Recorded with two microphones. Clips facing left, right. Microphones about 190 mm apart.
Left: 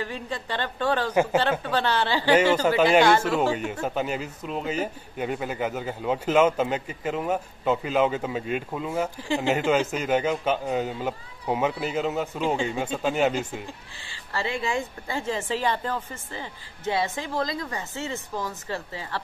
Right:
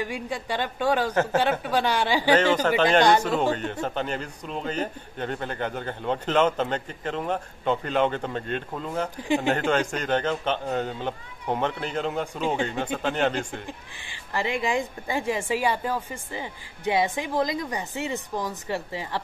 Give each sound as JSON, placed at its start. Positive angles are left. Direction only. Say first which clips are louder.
{"t": 0.0, "sound": "speech", "louder": "right 2 dB", "side_deg": -10}
{"t": 1.1, "sound": "speech", "louder": "left 2 dB", "side_deg": 10}
{"t": 1.4, "sound": "speech", "louder": "right 1 dB", "side_deg": -10}
{"t": 2.3, "sound": "speech", "louder": "left 2 dB", "side_deg": 10}
{"t": 13.7, "sound": "speech", "louder": "right 2 dB", "side_deg": -15}